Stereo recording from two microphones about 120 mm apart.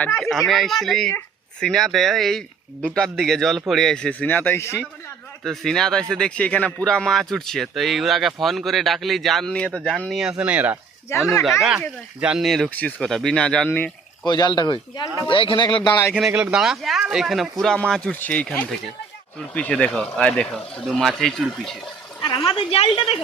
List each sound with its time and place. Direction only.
0.2 s speech: centre (ahead or behind); by 4.8 s 20° left (ahead or behind)
5.4 s speech: centre (ahead or behind)
10.2 s speech: 5° right (ahead or behind)
11.1 s speech: 20° left (ahead or behind)
11.6 s speech: 5° right (ahead or behind); by 13.9 s 15° left (ahead or behind)
14.3 s speech: 35° left (ahead or behind)
15.3 s a woman's voice: 45° left (ahead or behind)
16.1 s speech: 10° right (ahead or behind)
22.5 s a woman's voice: 50° left (ahead or behind)